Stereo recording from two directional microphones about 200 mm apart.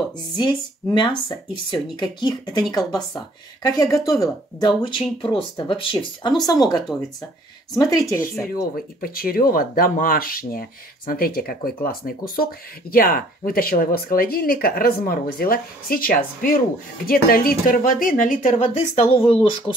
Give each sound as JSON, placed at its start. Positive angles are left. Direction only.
{"t": 0.4, "sound": "speech", "side_deg": 20}
{"t": 3.6, "sound": "speech", "side_deg": 15}
{"t": 8.7, "sound": "speech", "side_deg": 45}